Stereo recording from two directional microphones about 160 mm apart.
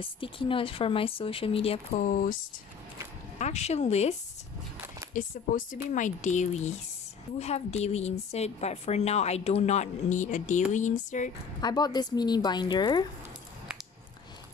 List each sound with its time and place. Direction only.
0.0 s speech: 35° left (ahead or behind); by 2.3 s 55° left (ahead or behind)
3.3 s a woman's voice: 45° left (ahead or behind)
5.1 s a woman's voice: 55° left (ahead or behind)
11.6 s a woman's voice: 25° left (ahead or behind)